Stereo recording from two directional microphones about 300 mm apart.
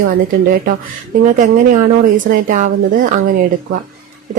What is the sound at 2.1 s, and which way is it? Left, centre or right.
Speech, right.